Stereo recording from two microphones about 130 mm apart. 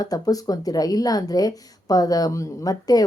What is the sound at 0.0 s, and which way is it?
Speech, 30° left (ahead or behind).